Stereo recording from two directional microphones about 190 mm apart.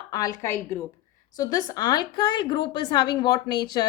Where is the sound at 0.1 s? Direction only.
20° left (ahead or behind).